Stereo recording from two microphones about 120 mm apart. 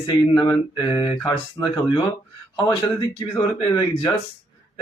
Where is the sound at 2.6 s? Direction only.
30° left (ahead or behind).